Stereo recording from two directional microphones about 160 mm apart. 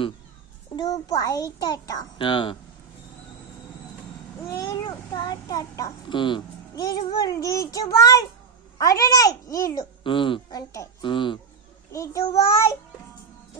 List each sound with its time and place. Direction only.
0.7 s a child's voice: 25° left (ahead or behind)
4.5 s a child's voice: 25° left (ahead or behind)
10.0 s a woman's voice: 30° left (ahead or behind)
10.7 s a child's voice: 20° left (ahead or behind)
11.1 s a woman's voice: 30° left (ahead or behind)
11.9 s a child's voice: 20° left (ahead or behind)